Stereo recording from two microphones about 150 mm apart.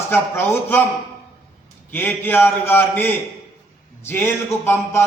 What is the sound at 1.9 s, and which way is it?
A man's voice, 15° left (ahead or behind).